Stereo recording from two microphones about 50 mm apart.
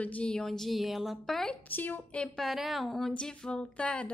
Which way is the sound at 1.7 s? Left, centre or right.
Left.